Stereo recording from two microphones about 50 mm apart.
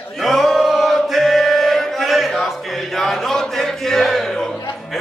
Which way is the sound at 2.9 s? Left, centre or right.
Centre.